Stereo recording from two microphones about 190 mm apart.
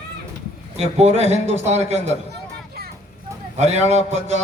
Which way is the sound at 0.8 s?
35° right (ahead or behind).